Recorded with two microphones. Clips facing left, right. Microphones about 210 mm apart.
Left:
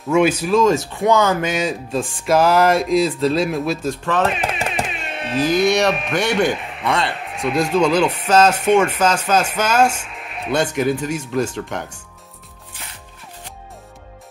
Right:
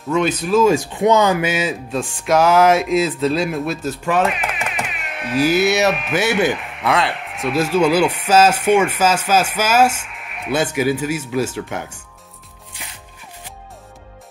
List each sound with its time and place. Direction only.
0.1 s speech: 5° left (ahead or behind)
0.6 s speech: 10° right (ahead or behind)
4.3 s a sound: 30° left (ahead or behind)
5.3 s speech: 10° right (ahead or behind)